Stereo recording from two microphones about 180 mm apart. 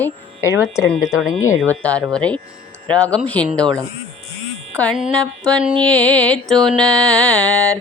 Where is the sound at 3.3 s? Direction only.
5° left (ahead or behind).